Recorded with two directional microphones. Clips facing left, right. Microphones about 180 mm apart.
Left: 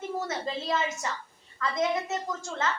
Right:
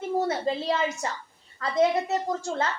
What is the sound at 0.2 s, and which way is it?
A woman's voice, 30° right (ahead or behind).